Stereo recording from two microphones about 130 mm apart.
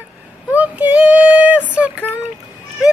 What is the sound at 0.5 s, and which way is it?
Female singing, 10° right (ahead or behind).